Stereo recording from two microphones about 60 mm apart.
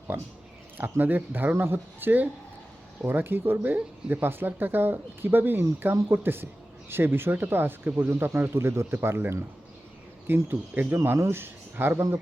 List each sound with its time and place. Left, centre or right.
0.1 s speech: right